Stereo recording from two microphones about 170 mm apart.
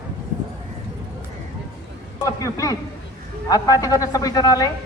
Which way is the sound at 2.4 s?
20° left (ahead or behind).